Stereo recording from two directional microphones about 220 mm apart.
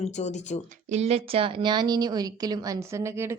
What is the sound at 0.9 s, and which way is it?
A woman's voice, 30° right (ahead or behind).